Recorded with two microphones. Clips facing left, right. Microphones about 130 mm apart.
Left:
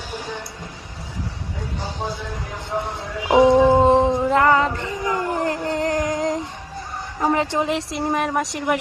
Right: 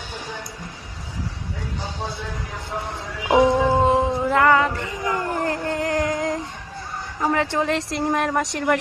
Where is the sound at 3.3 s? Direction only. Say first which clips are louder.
Left 3 dB; 15° left (ahead or behind).